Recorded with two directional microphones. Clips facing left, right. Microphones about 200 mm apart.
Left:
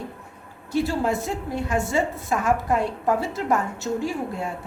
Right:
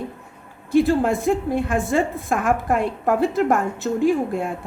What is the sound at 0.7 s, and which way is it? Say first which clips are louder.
A woman's voice: right 6 dB; 55° right (ahead or behind).